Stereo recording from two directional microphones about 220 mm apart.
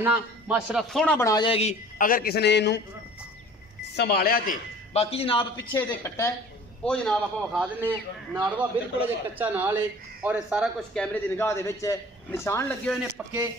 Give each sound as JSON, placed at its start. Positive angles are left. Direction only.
{"t": 0.0, "sound": "a man's voice", "side_deg": -5}
{"t": 3.9, "sound": "speech", "side_deg": 45}
{"t": 4.9, "sound": "a man's voice", "side_deg": 25}
{"t": 5.8, "sound": "a man's voice", "side_deg": 10}